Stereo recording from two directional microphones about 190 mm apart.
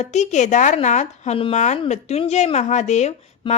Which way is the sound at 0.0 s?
35° left (ahead or behind).